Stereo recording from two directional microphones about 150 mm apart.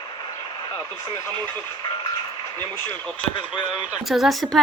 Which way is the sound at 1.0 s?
25° left (ahead or behind).